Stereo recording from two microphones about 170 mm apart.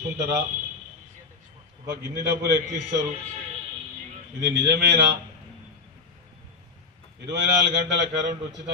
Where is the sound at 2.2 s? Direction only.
75° right (ahead or behind).